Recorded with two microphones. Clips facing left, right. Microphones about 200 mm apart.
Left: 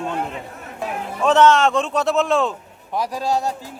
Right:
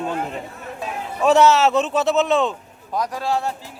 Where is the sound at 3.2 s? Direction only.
40° left (ahead or behind).